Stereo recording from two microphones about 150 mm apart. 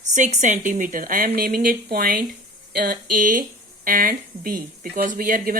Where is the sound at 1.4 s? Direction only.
80° right.